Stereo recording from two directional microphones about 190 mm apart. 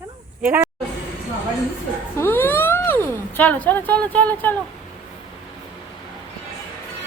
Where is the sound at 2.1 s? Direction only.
10° left (ahead or behind).